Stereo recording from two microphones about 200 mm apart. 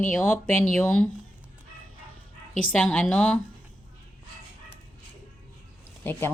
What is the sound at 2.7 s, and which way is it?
Speech, 5° left (ahead or behind).